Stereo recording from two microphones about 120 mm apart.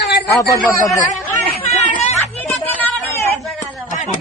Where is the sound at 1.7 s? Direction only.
75° left (ahead or behind).